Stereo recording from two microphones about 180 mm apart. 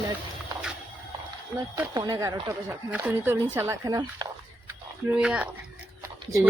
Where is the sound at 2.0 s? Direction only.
20° right (ahead or behind).